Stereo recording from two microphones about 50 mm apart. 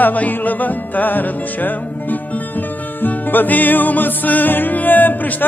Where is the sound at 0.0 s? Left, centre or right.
Left.